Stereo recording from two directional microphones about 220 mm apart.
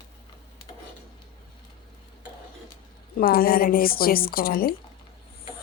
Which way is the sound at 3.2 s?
40° left (ahead or behind).